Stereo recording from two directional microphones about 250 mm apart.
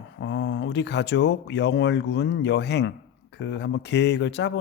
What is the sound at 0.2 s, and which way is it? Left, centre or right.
A man's voice, left.